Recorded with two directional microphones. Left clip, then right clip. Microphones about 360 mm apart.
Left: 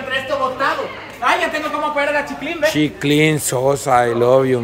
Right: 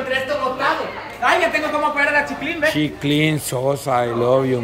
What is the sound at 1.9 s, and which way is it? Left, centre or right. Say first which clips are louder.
A man's voice: right 1 dB; centre.